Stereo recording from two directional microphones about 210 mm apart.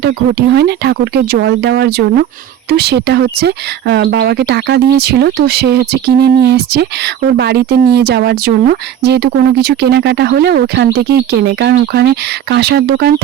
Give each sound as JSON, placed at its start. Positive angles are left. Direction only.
{"t": 0.0, "sound": "speech", "side_deg": -50}